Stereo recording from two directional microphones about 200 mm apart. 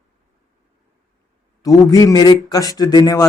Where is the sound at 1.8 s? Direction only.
20° left (ahead or behind).